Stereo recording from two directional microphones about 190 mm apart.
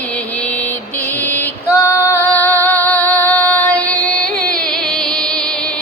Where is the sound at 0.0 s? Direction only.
5° left (ahead or behind).